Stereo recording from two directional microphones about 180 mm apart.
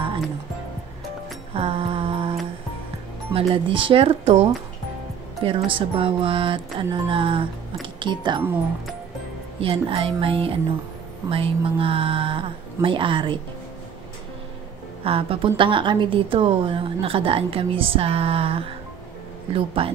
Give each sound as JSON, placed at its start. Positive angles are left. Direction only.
{"t": 1.5, "sound": "mantra", "side_deg": -30}
{"t": 3.3, "sound": "a woman's voice", "side_deg": -30}
{"t": 5.7, "sound": "speech", "side_deg": -30}
{"t": 9.6, "sound": "a woman's voice", "side_deg": -30}
{"t": 15.0, "sound": "a woman's voice", "side_deg": -30}